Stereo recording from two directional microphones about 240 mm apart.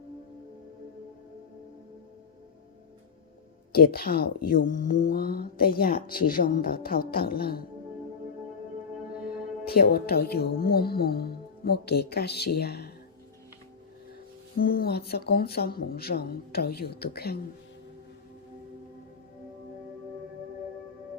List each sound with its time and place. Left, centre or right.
3.7 s speech: left
9.6 s speech: left
14.6 s speech: left